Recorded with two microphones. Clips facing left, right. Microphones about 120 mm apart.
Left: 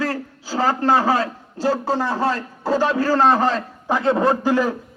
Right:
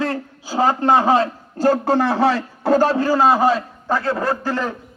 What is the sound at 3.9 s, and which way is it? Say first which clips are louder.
Speech: left 3 dB; 20° left (ahead or behind).